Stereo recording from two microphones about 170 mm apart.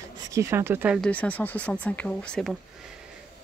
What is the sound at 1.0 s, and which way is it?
Speech, 10° left (ahead or behind).